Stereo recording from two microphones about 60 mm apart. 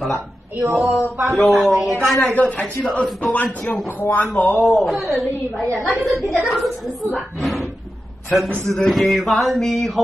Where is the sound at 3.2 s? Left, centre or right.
Left.